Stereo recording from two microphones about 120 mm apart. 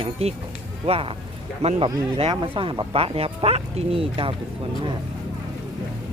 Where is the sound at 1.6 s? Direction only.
65° right (ahead or behind).